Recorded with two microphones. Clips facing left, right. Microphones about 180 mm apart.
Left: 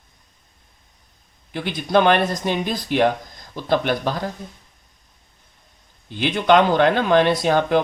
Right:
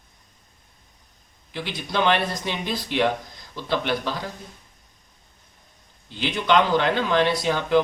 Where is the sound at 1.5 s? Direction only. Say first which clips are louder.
Left 8 dB; 50° left (ahead or behind).